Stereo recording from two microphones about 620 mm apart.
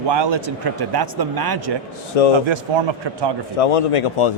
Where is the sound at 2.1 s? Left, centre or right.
Left.